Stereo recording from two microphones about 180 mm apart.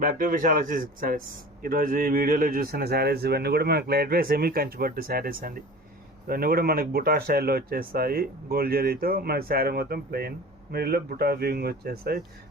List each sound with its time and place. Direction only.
0.0 s speech: 50° right (ahead or behind)